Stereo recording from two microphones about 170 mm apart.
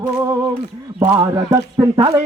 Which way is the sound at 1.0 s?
30° right (ahead or behind).